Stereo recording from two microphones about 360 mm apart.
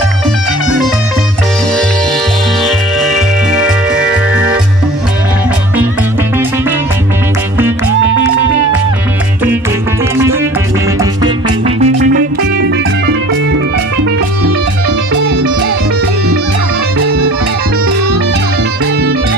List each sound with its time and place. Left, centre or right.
2.6 s music: centre
11.6 s music: centre